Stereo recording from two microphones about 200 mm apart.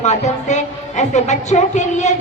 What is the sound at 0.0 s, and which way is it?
A woman's voice, 35° left (ahead or behind).